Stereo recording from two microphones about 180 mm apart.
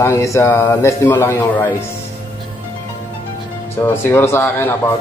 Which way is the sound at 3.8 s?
15° left (ahead or behind).